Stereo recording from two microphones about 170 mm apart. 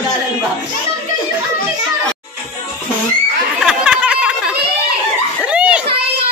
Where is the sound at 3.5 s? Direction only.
5° right (ahead or behind).